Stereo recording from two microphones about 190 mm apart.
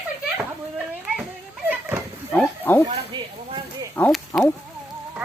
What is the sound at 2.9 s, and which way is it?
Chop, 25° right (ahead or behind).